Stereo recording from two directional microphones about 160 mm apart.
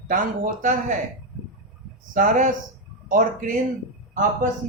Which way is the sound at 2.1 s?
50° right (ahead or behind).